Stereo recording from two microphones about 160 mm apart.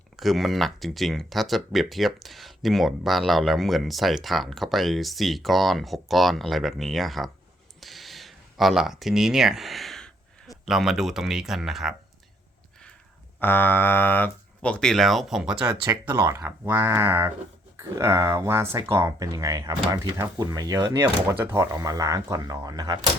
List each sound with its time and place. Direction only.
0.2 s speech: centre (ahead or behind)
7.8 s a sound: centre (ahead or behind)
10.7 s speech: centre (ahead or behind)
13.4 s speech: 15° left (ahead or behind)
16.0 s speech: 20° right (ahead or behind)